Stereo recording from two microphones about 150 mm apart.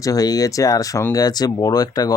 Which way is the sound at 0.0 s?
25° left (ahead or behind).